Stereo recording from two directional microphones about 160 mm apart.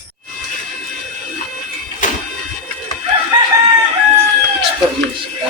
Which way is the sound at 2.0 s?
55° left (ahead or behind).